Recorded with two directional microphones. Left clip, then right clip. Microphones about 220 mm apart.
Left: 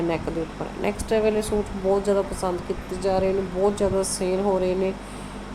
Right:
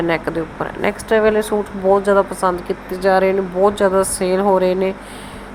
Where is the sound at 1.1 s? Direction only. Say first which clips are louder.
Right 8 dB; 10° right (ahead or behind).